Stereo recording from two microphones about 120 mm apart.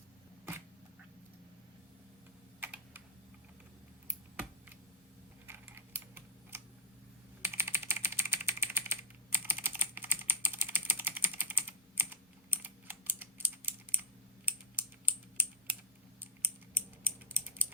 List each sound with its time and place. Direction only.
2.6 s typing: 15° right (ahead or behind)
5.5 s typing: 20° right (ahead or behind)